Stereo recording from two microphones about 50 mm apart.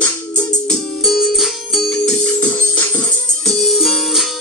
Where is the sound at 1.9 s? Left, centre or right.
Centre.